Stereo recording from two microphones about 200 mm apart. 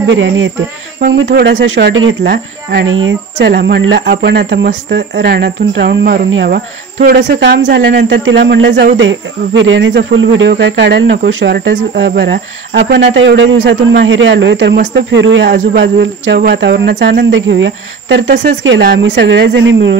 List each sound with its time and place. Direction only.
0.1 s speech: 75° right (ahead or behind)